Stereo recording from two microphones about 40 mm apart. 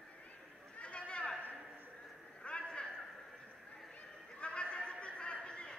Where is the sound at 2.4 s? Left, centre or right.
Left.